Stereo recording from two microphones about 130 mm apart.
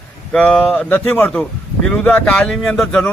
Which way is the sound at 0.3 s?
10° left (ahead or behind).